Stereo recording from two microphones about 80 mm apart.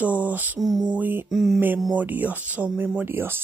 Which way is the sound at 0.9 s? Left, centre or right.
Right.